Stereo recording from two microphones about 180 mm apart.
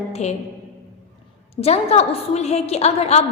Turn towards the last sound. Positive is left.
turn(degrees=35)  # may be behind; listen again after turning